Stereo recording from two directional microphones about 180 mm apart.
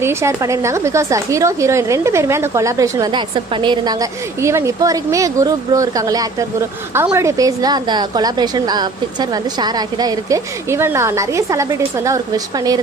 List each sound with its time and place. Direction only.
0.0 s a woman's voice: 15° right (ahead or behind)